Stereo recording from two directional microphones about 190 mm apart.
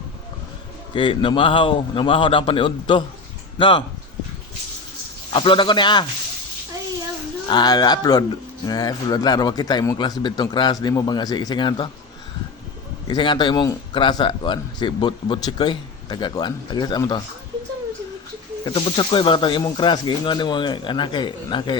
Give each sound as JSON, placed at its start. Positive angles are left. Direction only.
{"t": 0.9, "sound": "a man's voice", "side_deg": 25}
{"t": 5.3, "sound": "a man's voice", "side_deg": 25}
{"t": 7.4, "sound": "a man's voice", "side_deg": 20}
{"t": 13.1, "sound": "a man's voice", "side_deg": 25}
{"t": 18.6, "sound": "a man's voice", "side_deg": 25}